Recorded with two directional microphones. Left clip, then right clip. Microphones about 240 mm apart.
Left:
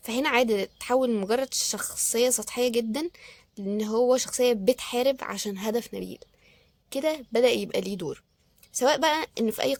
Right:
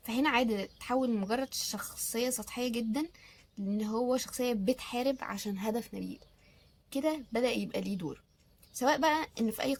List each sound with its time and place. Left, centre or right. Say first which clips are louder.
0.0 s a woman's voice: left 6 dB; left